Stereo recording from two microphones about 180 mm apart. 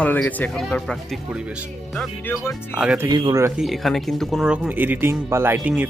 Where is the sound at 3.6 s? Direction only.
Centre (ahead or behind).